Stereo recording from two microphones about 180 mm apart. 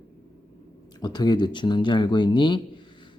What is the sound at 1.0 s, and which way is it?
Speech, 25° left (ahead or behind).